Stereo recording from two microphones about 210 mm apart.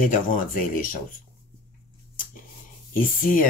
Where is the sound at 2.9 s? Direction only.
40° left (ahead or behind).